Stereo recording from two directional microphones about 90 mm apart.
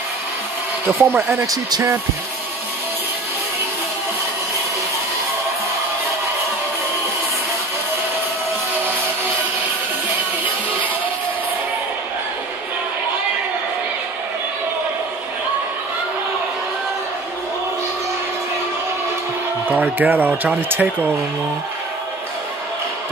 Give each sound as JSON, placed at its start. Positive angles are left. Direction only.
{"t": 0.8, "sound": "speech", "side_deg": -25}
{"t": 19.7, "sound": "speech", "side_deg": -20}